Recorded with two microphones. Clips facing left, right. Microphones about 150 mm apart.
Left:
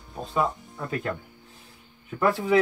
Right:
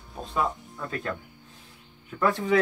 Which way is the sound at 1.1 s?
25° left (ahead or behind).